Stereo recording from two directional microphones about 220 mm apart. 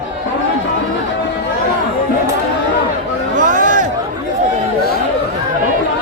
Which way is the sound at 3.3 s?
35° right (ahead or behind).